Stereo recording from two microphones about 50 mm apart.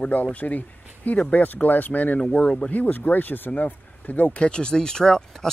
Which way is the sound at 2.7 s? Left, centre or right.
Left.